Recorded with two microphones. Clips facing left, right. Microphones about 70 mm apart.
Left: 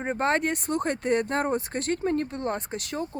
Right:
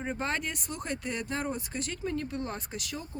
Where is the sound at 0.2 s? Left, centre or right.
Left.